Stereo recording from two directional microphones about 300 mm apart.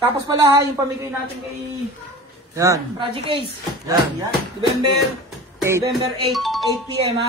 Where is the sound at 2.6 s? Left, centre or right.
Centre.